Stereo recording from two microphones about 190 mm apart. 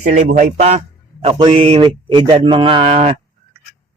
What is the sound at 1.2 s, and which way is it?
Mantra, 30° right (ahead or behind).